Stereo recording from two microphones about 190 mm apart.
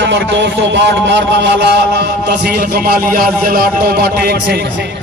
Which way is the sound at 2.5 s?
50° right (ahead or behind).